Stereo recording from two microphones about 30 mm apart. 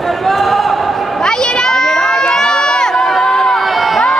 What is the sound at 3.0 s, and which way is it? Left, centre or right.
Crowd, centre.